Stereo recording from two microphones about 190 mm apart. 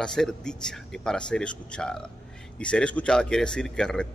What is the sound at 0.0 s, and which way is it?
Speech, 5° left (ahead or behind).